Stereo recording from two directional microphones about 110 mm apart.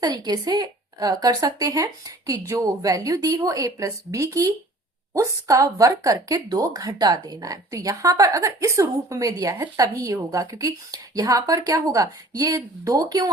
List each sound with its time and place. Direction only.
0.0 s speech: 35° right (ahead or behind)